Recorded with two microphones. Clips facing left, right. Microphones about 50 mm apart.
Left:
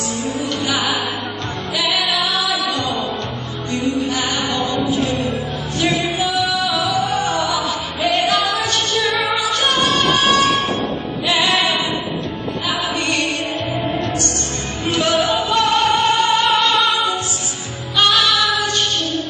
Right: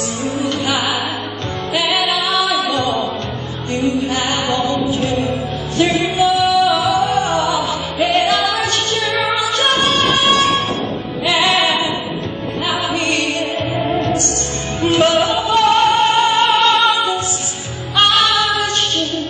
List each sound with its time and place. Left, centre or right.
0.2 s music: right